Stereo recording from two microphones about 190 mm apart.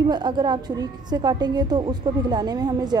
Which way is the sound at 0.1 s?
25° right (ahead or behind).